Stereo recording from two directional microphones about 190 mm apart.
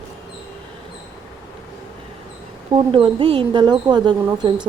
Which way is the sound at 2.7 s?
30° right (ahead or behind).